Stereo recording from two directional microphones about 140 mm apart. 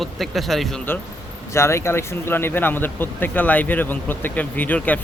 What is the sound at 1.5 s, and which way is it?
Speech, 20° left (ahead or behind).